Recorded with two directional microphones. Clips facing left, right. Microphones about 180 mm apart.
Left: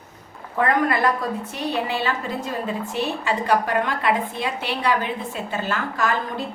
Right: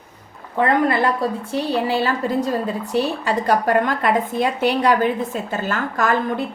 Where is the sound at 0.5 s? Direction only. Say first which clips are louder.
Right 3 dB; 25° right (ahead or behind); by 6.1 s 45° right (ahead or behind).